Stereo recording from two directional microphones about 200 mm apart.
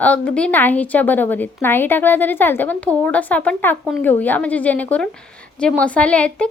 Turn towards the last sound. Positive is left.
turn(degrees=5)  # may be behind; listen again after turning